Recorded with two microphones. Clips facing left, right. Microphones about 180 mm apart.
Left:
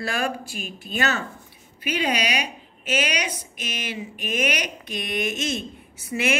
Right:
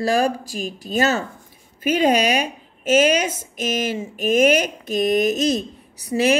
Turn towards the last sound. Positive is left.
turn(degrees=-35)  # may be behind; listen again after turning